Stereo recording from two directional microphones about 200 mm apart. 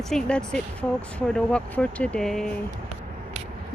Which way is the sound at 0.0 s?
Centre (ahead or behind).